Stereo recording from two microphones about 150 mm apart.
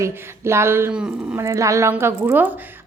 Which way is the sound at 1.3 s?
20° right (ahead or behind).